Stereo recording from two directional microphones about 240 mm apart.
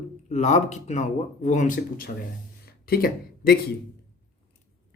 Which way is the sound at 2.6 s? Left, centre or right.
Left.